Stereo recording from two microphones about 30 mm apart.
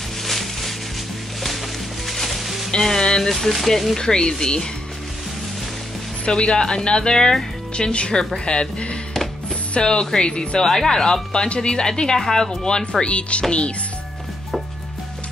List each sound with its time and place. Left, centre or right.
0.2 s a sound: centre
2.0 s music: centre
2.8 s music: centre
3.3 s speech: centre
4.0 s speech: left
6.2 s speech: left
7.7 s speech: left
10.6 s speech: centre
11.4 s speech: left
11.7 s speech: left